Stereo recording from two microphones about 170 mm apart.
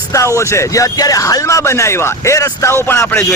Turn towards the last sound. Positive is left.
turn(degrees=10)  # may be behind; listen again after turning